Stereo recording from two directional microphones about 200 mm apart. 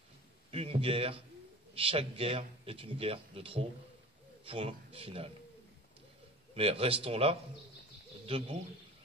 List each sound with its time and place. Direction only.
0.5 s a man's voice: 30° right (ahead or behind)
6.5 s a man's voice: 30° right (ahead or behind)